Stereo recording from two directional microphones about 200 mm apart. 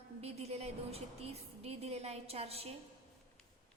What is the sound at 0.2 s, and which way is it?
A woman's voice, 30° right (ahead or behind).